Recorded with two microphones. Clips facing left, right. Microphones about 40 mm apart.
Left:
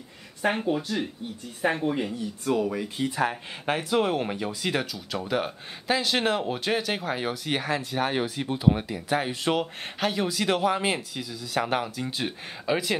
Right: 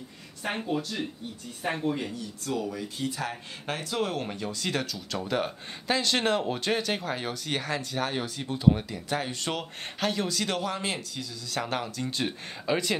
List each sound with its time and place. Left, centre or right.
0.5 s speech: centre